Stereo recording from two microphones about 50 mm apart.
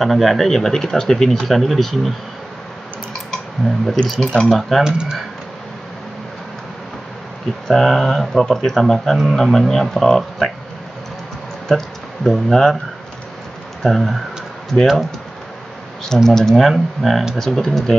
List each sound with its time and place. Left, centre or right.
0.0 s speech: centre
3.6 s speech: centre
4.0 s speech: centre
4.5 s speech: centre
4.8 s speech: centre
7.6 s speech: centre
11.7 s speech: centre
13.8 s speech: centre
16.3 s speech: centre